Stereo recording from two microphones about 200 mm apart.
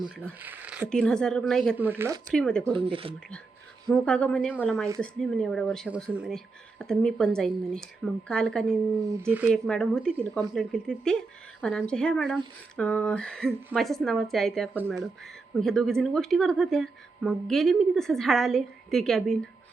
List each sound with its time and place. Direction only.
0.0 s a woman's voice: 5° left (ahead or behind)
0.3 s speech: 10° right (ahead or behind)
0.9 s a woman's voice: 5° left (ahead or behind)
1.8 s speech: 10° right (ahead or behind)
2.3 s a woman's voice: 5° left (ahead or behind)
2.7 s speech: 25° right (ahead or behind)
3.8 s a woman's voice: 5° left (ahead or behind)
9.1 s speech: 10° right (ahead or behind)
9.5 s a woman's voice: 5° left (ahead or behind)